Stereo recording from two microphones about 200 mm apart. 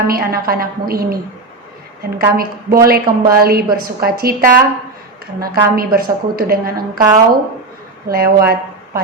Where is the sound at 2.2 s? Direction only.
50° right (ahead or behind).